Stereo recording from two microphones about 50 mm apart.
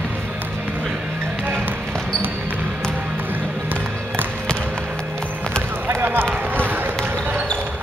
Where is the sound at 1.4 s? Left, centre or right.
Right.